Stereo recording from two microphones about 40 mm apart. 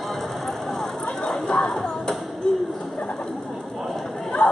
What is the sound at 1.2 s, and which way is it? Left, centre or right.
Chatter, left.